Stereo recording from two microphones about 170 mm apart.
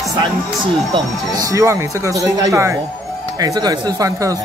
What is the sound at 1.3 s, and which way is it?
Speech, 20° right (ahead or behind).